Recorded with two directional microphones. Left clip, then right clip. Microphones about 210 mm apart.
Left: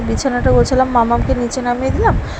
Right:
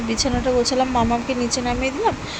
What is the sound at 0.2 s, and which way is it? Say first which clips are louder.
Speech: left 6 dB; 15° left (ahead or behind).